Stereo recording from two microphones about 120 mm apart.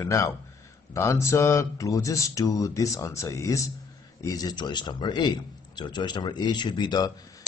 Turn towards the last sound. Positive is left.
turn(degrees=35)  # may be behind; listen again after turning